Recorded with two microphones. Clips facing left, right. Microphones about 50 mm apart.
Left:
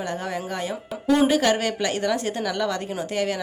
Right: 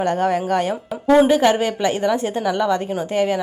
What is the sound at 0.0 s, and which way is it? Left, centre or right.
Speech, right.